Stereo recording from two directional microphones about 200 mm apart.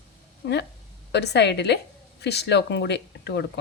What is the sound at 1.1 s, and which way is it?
A woman's voice, 60° left (ahead or behind).